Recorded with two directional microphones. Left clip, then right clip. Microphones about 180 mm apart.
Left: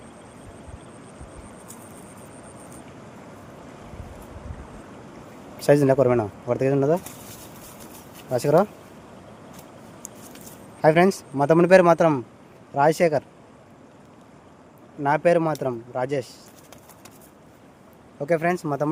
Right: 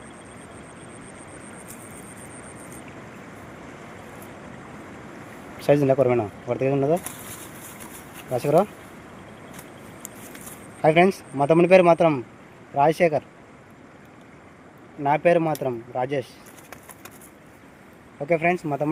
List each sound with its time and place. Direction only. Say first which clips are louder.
5.5 s speech: left 1 dB; 30° left (ahead or behind)
8.3 s speech: left 1 dB; 30° left (ahead or behind)
10.8 s speech: even; 25° left (ahead or behind)
15.0 s speech: even; 25° left (ahead or behind)
18.2 s speech: right 1 dB; 30° left (ahead or behind)